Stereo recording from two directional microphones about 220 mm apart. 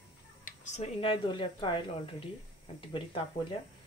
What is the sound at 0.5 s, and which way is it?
Speech, 25° left (ahead or behind).